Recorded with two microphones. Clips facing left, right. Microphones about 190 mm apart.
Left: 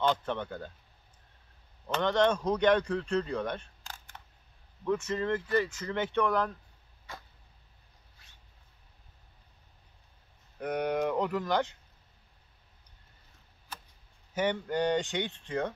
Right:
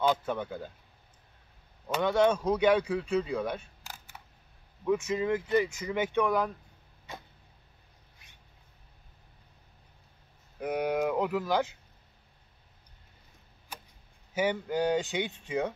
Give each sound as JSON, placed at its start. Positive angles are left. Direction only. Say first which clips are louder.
{"t": 0.0, "sound": "speech", "louder": "right 1 dB", "side_deg": -10}
{"t": 1.9, "sound": "speech", "louder": "right 1 dB", "side_deg": -10}
{"t": 7.1, "sound": "a sound", "louder": "right 2 dB", "side_deg": -20}
{"t": 8.2, "sound": "mouse", "louder": "right 2 dB", "side_deg": -15}
{"t": 10.6, "sound": "speech", "louder": "right 1 dB", "side_deg": -5}
{"t": 13.7, "sound": "tick-tock", "louder": "right 1 dB", "side_deg": -10}
{"t": 14.3, "sound": "speech", "louder": "right 1 dB", "side_deg": -5}